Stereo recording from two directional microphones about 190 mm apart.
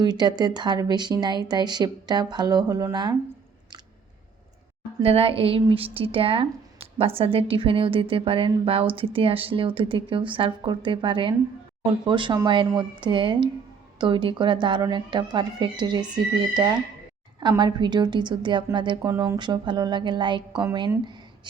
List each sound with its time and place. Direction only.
0.0 s speech: 20° right (ahead or behind)
5.0 s speech: 30° right (ahead or behind)